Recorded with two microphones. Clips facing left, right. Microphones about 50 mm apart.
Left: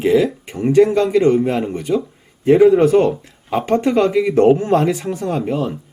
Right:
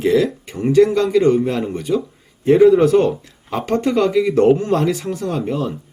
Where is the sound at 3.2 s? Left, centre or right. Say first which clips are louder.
Left 4 dB; left.